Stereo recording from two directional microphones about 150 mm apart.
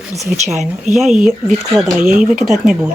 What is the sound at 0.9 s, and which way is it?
Speech, 5° right (ahead or behind).